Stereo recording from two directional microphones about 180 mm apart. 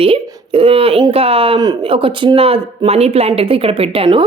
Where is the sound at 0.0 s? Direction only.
30° right (ahead or behind).